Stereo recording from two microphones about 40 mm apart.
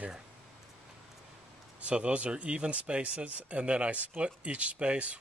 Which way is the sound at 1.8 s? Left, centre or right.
Right.